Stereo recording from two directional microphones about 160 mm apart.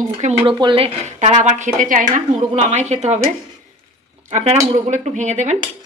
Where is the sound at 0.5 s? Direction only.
30° right (ahead or behind).